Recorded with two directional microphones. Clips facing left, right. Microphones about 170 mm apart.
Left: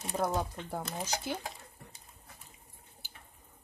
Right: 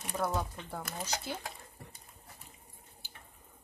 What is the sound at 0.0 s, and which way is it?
Speech, 25° left (ahead or behind).